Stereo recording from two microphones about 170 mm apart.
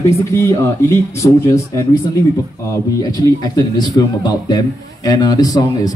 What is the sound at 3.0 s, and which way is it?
A man's voice, 20° left (ahead or behind).